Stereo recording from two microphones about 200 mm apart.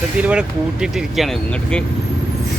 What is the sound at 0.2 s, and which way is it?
Speech, 5° right (ahead or behind).